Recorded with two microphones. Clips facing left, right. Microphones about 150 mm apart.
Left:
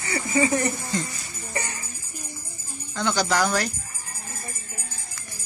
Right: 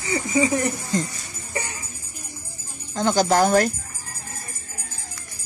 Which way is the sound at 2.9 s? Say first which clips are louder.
Right 5 dB; 40° right (ahead or behind).